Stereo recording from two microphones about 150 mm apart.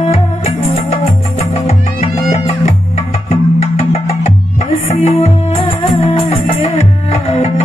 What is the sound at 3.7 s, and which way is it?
Music, 40° left (ahead or behind).